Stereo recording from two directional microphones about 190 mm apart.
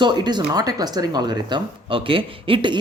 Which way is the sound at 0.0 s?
25° right (ahead or behind).